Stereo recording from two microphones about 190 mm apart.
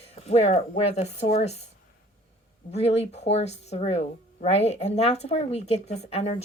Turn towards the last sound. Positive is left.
turn(degrees=35)  # may be behind; listen again after turning